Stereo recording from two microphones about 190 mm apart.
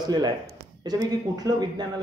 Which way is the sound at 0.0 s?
20° right (ahead or behind).